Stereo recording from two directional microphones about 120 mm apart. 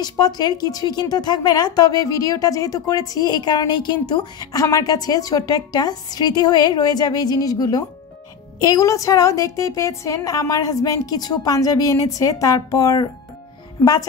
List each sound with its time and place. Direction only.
0.0 s a woman's voice: 35° left (ahead or behind)